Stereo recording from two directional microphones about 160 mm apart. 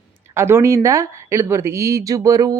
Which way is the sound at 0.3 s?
15° right (ahead or behind).